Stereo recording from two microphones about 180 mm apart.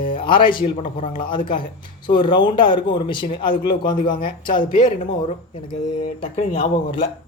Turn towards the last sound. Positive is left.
turn(degrees=35)  # may be behind; listen again after turning